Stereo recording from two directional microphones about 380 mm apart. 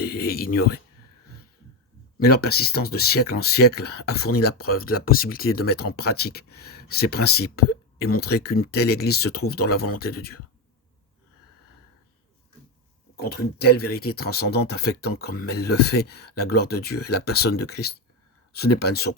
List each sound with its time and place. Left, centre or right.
0.0 s speech: left
2.1 s speech: left
13.1 s speech: left